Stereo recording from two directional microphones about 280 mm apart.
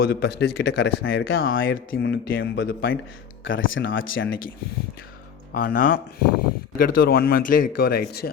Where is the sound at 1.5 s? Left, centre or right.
Left.